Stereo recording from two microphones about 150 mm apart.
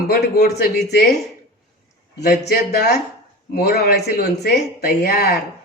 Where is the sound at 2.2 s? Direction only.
90° left.